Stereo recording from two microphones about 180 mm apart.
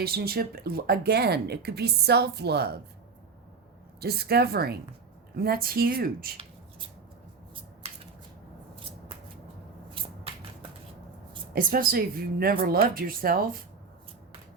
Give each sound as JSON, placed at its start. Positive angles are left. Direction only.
{"t": 0.0, "sound": "speech", "side_deg": -60}
{"t": 4.0, "sound": "speech", "side_deg": -60}
{"t": 11.5, "sound": "speech", "side_deg": -55}